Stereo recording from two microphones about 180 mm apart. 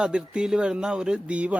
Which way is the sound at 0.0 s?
5° right (ahead or behind).